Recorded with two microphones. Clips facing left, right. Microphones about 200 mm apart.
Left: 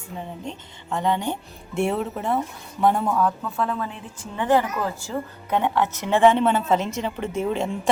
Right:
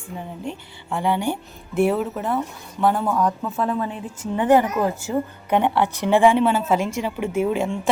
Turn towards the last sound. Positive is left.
turn(degrees=-5)  # may be behind; listen again after turning